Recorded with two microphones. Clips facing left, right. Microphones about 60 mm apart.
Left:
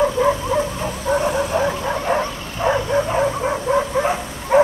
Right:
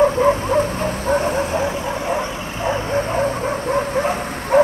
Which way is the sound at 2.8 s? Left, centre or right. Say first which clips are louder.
Left 1 dB; right.